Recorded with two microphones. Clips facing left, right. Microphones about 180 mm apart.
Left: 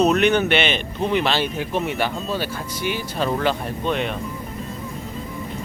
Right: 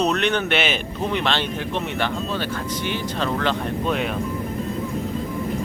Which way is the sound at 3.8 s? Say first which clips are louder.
Left 1 dB; centre (ahead or behind).